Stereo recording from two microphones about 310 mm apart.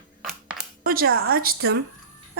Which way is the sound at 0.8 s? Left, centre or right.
Right.